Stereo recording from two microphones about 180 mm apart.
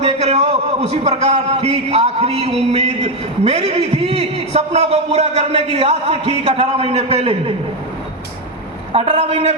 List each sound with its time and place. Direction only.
0.0 s a man's voice: 40° right (ahead or behind)
8.9 s a man's voice: 30° right (ahead or behind)